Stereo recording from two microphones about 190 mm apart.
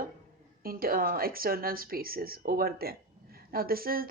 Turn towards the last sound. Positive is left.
turn(degrees=-50)  # may be behind; listen again after turning